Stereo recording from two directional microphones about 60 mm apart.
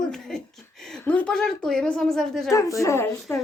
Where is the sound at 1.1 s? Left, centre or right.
Left.